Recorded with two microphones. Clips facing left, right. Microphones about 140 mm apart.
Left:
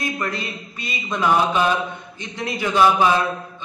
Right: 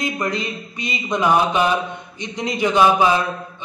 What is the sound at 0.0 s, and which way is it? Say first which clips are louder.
A man's voice: right 3 dB; 20° right (ahead or behind).